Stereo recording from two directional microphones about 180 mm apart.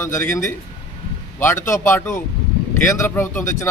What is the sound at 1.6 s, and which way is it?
A man's voice, 15° left (ahead or behind).